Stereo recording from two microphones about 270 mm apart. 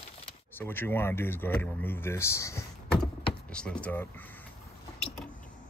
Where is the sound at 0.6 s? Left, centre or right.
Centre.